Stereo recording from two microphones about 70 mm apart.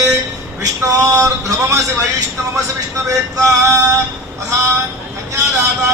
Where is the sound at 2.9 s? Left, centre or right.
Right.